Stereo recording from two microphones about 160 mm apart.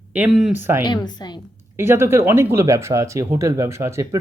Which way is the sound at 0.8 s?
30° left (ahead or behind).